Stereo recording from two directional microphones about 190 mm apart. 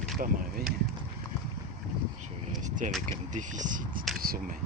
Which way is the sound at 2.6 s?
40° right (ahead or behind).